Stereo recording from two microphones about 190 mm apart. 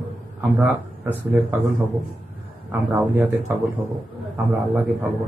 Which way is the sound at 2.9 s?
5° right (ahead or behind).